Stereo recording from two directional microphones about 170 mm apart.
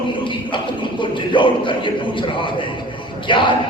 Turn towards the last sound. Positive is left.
turn(degrees=30)  # may be behind; listen again after turning